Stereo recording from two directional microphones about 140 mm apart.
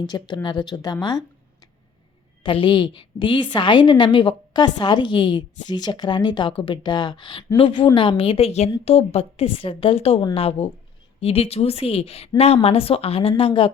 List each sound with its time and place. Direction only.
0.0 s a woman's voice: 30° left (ahead or behind)
2.4 s a woman's voice: 35° left (ahead or behind)